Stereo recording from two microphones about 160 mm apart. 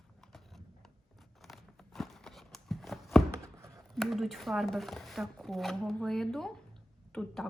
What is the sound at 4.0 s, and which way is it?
Speech, centre (ahead or behind).